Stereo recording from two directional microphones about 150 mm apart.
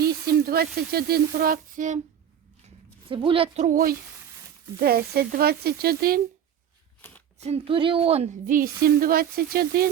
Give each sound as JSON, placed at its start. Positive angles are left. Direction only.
{"t": 0.0, "sound": "sizzle", "side_deg": -85}
{"t": 2.6, "sound": "speech", "side_deg": -35}
{"t": 4.8, "sound": "speech", "side_deg": -90}
{"t": 7.0, "sound": "a sound", "side_deg": 15}
{"t": 7.3, "sound": "a woman's voice", "side_deg": -45}
{"t": 8.4, "sound": "speech", "side_deg": -70}